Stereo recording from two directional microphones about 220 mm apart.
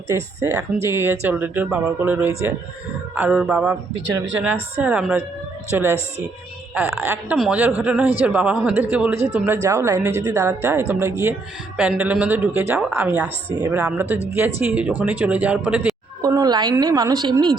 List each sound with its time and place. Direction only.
0.1 s speech: 15° right (ahead or behind)
16.2 s speech: 15° right (ahead or behind)